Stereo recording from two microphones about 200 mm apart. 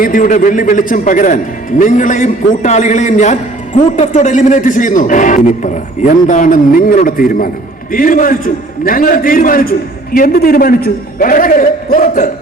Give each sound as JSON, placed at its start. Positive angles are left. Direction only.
{"t": 0.0, "sound": "a man's voice", "side_deg": 40}